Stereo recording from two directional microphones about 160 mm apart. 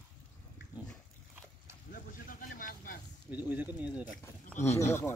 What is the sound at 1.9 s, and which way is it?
Vehicle, 60° left (ahead or behind).